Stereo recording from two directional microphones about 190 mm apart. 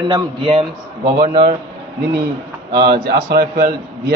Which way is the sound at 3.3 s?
55° right (ahead or behind).